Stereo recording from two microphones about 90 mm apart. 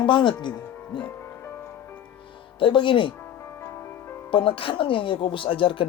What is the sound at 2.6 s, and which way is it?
Speech, 65° left (ahead or behind).